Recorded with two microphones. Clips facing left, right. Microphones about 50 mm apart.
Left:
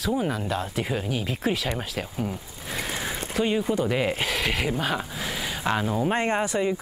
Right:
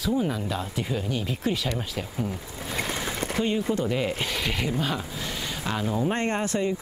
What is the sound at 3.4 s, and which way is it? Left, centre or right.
Speech, centre.